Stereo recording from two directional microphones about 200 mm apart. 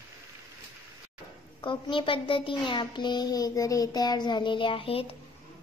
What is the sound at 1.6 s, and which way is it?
A child's voice, 25° left (ahead or behind).